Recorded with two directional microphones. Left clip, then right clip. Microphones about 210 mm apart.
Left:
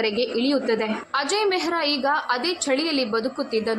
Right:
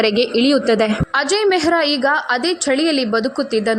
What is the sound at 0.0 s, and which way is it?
A woman's voice, 25° right (ahead or behind).